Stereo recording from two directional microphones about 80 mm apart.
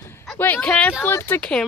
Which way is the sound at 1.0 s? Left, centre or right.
Left.